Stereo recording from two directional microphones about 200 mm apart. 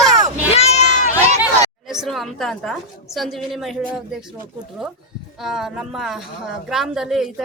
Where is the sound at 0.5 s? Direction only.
35° left (ahead or behind).